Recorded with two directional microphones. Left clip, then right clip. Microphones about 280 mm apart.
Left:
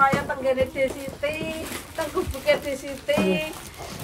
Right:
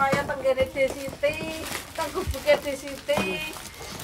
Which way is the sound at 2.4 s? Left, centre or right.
Centre.